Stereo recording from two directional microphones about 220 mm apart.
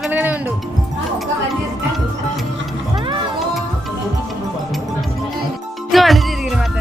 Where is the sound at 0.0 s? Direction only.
10° right (ahead or behind).